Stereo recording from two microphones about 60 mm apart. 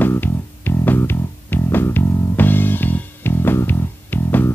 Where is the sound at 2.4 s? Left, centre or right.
Left.